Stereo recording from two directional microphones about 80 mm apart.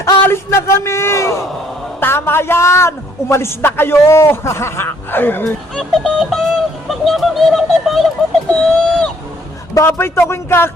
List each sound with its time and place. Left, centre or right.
0.0 s a man's voice: left
5.7 s speech: centre
9.7 s a man's voice: left